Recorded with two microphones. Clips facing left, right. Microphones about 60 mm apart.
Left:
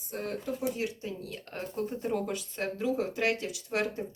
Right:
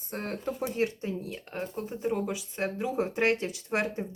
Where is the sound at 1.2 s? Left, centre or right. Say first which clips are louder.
Right 3 dB; centre.